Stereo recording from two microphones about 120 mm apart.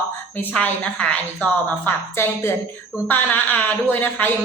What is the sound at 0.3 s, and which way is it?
A man's voice, 15° left (ahead or behind).